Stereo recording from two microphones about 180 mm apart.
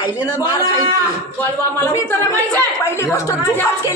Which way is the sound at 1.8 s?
10° left (ahead or behind).